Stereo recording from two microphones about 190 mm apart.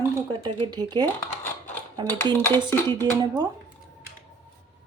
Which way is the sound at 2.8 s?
20° right (ahead or behind).